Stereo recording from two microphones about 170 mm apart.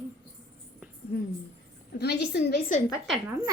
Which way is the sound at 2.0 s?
70° left (ahead or behind).